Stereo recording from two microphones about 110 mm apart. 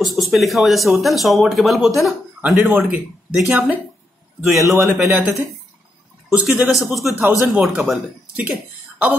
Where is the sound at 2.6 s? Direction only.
15° right (ahead or behind).